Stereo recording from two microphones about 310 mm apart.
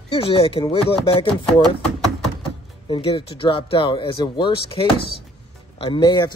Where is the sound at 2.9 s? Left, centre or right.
Centre.